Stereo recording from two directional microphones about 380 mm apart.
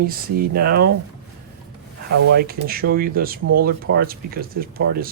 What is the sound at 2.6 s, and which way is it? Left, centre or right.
Speech, right.